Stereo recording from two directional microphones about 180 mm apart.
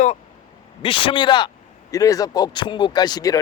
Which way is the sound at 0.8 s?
30° left (ahead or behind).